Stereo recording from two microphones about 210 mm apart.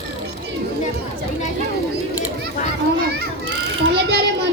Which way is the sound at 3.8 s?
55° right (ahead or behind).